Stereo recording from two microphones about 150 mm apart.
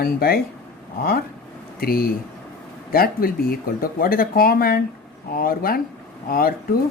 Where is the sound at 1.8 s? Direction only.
80° left.